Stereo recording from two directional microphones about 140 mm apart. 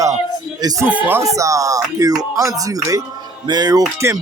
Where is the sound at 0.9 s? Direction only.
15° right (ahead or behind).